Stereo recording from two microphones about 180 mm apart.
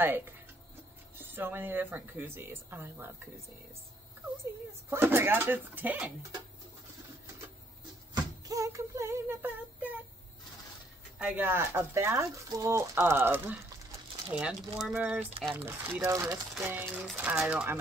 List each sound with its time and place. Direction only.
0.0 s speech: 10° right (ahead or behind)
4.8 s speech: 15° right (ahead or behind)
8.1 s a sound: 20° right (ahead or behind)
11.1 s speech: 10° right (ahead or behind)